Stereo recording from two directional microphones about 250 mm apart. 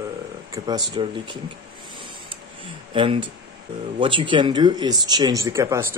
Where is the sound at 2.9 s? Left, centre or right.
Right.